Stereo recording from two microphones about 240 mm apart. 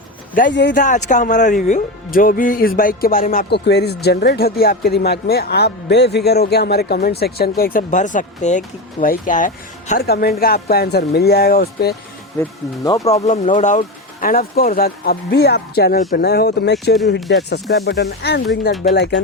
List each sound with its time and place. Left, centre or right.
0.3 s speech: left
0.8 s speech: left
12.4 s speech: centre
13.2 s speech: left
17.2 s speech: centre
17.5 s speech: left